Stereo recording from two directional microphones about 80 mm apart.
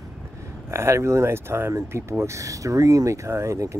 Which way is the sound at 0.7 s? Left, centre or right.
Right.